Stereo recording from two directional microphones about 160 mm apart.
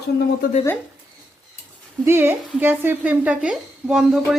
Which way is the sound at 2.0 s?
15° right (ahead or behind).